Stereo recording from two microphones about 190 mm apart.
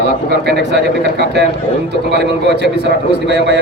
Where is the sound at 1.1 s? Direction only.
60° right (ahead or behind).